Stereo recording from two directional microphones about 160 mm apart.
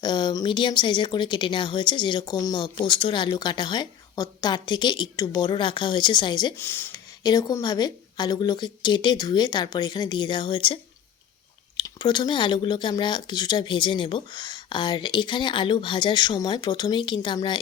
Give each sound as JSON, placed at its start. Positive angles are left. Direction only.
{"t": 0.0, "sound": "speech", "side_deg": 25}
{"t": 6.6, "sound": "speech", "side_deg": 10}
{"t": 7.2, "sound": "speech", "side_deg": 25}
{"t": 11.8, "sound": "speech", "side_deg": 30}